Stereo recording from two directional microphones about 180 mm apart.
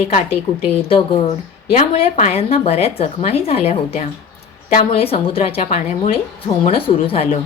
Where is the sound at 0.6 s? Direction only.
30° left (ahead or behind).